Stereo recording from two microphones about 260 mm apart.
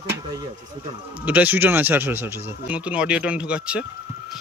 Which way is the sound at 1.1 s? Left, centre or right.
Centre.